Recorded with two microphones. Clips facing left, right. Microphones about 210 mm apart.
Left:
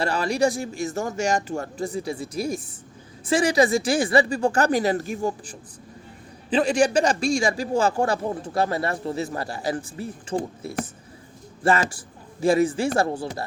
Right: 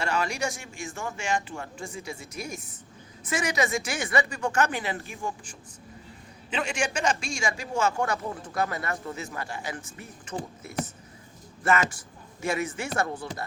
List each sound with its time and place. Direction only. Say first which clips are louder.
0.0 s a man's voice: left 7 dB; 35° left (ahead or behind)
11.6 s a man's voice: left 3 dB; 30° left (ahead or behind)